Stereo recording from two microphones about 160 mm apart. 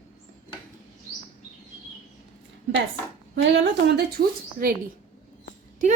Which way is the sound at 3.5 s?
90° right.